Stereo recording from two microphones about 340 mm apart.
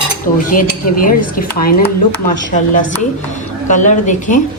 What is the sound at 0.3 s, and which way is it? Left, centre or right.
A woman's voice, left.